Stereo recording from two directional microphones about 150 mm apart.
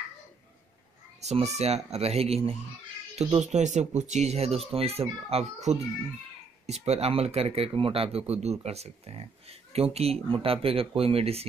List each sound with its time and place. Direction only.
1.2 s speech: 45° right (ahead or behind)